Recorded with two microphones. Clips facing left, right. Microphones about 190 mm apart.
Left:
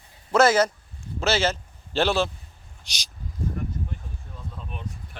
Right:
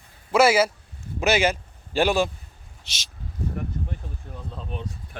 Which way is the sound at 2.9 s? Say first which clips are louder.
Even; centre (ahead or behind).